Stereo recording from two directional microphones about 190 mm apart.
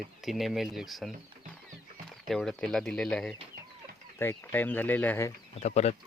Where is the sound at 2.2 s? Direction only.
Centre (ahead or behind).